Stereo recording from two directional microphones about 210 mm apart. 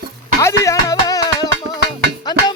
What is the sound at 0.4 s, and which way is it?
Music, 15° left (ahead or behind).